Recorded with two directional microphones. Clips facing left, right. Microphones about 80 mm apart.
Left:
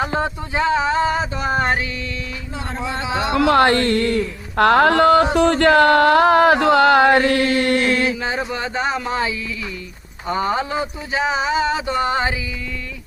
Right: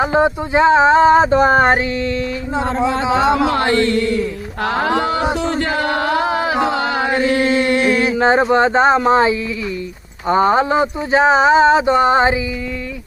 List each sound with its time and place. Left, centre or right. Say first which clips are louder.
0.0 s speech: right 7 dB; centre; by 2.6 s right
3.2 s music: right 2 dB; right
3.5 s speech: left 1 dB; left
5.4 s a sound: left 6 dB; left
7.3 s music: right 2 dB; right
8.1 s speech: right 11 dB; right